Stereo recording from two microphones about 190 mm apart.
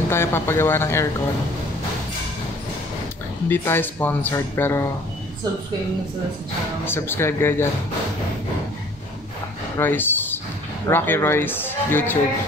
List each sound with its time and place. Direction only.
0.1 s speech: 10° left (ahead or behind)
3.4 s speech: 10° left (ahead or behind)
6.9 s speech: 10° left (ahead or behind)
9.8 s a sound: 10° left (ahead or behind)
10.9 s speech: 10° left (ahead or behind)